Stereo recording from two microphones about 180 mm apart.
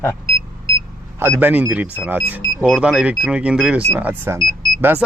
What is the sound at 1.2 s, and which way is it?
Speech, 10° right (ahead or behind).